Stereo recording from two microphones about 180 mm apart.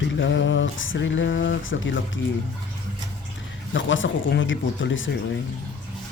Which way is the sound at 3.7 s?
90° left.